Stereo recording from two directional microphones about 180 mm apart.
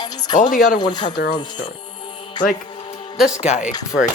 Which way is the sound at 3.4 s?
40° left (ahead or behind).